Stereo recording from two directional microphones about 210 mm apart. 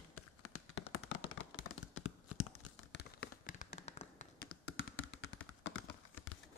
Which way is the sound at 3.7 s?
30° left (ahead or behind).